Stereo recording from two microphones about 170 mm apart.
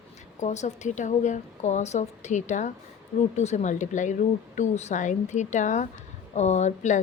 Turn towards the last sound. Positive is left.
turn(degrees=45)  # may be behind; listen again after turning